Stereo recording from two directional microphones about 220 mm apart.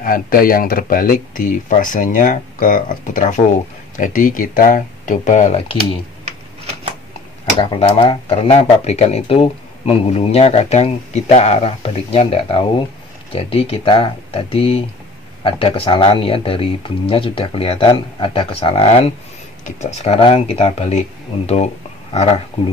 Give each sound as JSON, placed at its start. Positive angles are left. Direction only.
{"t": 0.0, "sound": "speech", "side_deg": 40}
{"t": 5.8, "sound": "typing", "side_deg": -30}
{"t": 7.5, "sound": "speech", "side_deg": 25}
{"t": 22.1, "sound": "speech", "side_deg": 30}